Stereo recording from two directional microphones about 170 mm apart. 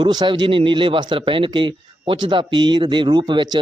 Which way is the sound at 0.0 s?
25° right (ahead or behind).